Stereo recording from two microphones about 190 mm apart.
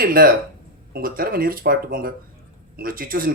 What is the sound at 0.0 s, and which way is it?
Speech, 50° right (ahead or behind).